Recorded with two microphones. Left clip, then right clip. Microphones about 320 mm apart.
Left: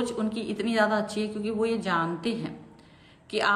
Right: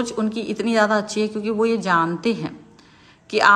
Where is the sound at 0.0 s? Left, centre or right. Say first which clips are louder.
Right 5 dB; centre.